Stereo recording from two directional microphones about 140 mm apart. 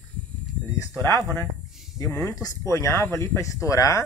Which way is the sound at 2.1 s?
20° left (ahead or behind).